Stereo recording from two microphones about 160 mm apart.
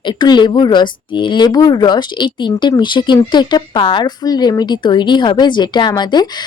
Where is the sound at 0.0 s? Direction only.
30° left (ahead or behind).